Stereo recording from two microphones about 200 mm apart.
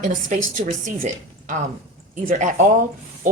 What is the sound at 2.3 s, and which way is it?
Speech, 40° right (ahead or behind).